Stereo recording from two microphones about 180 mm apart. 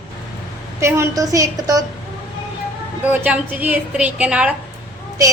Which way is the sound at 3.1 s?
10° right (ahead or behind).